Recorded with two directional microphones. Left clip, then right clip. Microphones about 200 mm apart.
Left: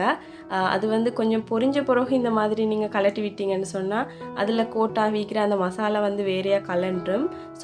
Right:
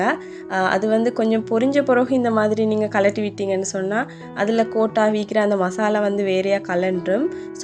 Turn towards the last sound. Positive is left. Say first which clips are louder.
# right 4 dB
turn(degrees=-20)  # may be behind; listen again after turning